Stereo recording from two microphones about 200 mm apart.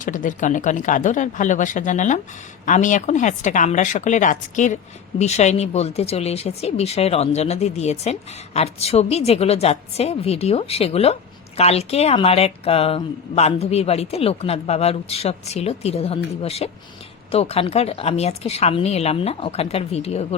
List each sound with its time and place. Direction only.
0.0 s a woman's voice: 40° left (ahead or behind)